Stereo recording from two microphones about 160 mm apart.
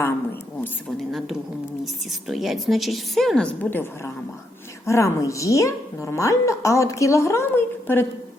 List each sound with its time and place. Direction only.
0.9 s a woman's voice: centre (ahead or behind)